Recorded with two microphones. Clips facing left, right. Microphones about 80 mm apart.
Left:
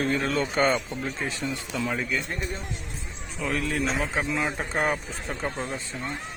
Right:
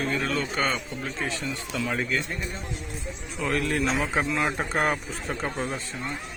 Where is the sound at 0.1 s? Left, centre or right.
Left.